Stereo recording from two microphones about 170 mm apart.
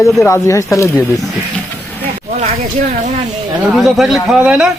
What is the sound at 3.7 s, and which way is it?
Speech, centre (ahead or behind).